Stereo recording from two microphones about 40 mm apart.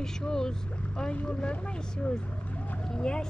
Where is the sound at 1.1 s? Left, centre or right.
Left.